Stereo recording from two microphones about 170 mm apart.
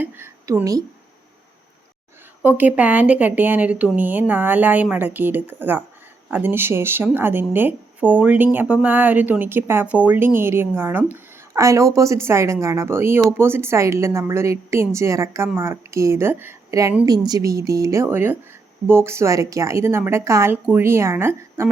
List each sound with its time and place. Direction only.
0.0 s a woman's voice: 10° right (ahead or behind)
2.4 s a woman's voice: 10° right (ahead or behind)